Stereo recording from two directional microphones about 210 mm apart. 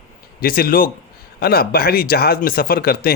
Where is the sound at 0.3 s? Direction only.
45° left (ahead or behind).